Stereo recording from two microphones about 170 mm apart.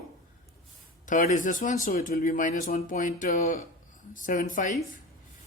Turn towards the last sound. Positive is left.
turn(degrees=50)  # may be behind; listen again after turning